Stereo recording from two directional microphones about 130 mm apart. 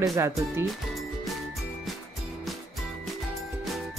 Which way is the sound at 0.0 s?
25° right (ahead or behind).